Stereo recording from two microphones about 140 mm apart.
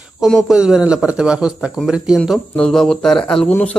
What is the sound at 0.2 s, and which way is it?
A man's voice, centre (ahead or behind).